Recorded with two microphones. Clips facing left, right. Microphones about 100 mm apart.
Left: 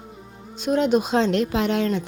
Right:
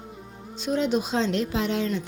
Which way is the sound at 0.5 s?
55° left (ahead or behind).